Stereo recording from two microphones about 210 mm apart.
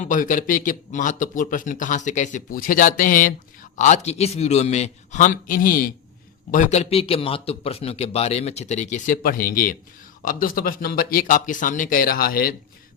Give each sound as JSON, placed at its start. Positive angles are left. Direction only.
{"t": 0.0, "sound": "a man's voice", "side_deg": 40}